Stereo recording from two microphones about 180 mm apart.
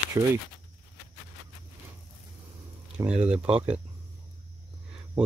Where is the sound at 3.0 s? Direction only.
20° right (ahead or behind).